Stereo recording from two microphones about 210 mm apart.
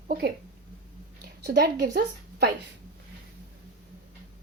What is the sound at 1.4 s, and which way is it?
A woman's voice, 50° right (ahead or behind).